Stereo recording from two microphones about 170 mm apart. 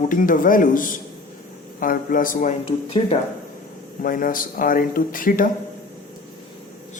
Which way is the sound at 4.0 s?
55° left (ahead or behind).